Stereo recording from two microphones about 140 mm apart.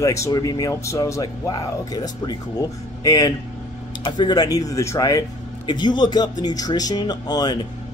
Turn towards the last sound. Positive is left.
turn(degrees=30)  # may be behind; listen again after turning